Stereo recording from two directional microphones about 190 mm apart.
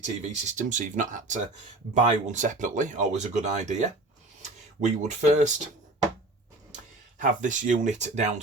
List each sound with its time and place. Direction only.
0.0 s speech: 40° right (ahead or behind)
6.7 s speech: 40° right (ahead or behind)